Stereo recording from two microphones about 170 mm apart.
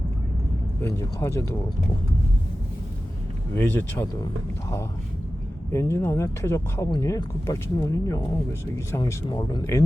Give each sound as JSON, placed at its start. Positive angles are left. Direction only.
{"t": 0.8, "sound": "speech", "side_deg": 15}
{"t": 3.5, "sound": "speech", "side_deg": 10}
{"t": 5.7, "sound": "speech", "side_deg": 15}